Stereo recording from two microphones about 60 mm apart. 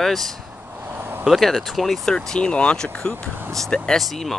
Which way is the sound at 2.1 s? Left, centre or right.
Centre.